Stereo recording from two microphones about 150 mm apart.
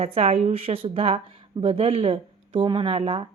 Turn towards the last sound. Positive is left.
turn(degrees=-35)  # may be behind; listen again after turning